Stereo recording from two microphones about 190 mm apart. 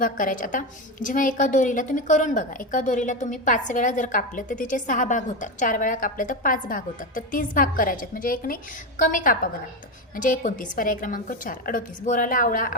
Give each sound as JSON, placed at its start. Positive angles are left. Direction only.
{"t": 0.0, "sound": "a woman's voice", "side_deg": 45}